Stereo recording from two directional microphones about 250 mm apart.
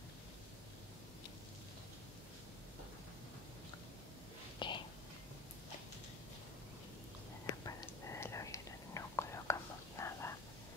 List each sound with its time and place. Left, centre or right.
4.6 s whispering: centre
7.6 s whispering: centre